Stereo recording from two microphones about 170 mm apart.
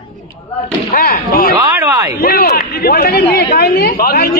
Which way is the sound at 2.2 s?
60° left (ahead or behind).